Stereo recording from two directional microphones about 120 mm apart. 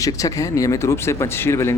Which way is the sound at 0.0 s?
30° left (ahead or behind).